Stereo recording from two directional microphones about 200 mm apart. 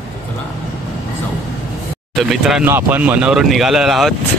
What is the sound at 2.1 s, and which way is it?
Speech, centre (ahead or behind).